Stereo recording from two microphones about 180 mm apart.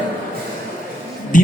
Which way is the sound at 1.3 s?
45° left (ahead or behind).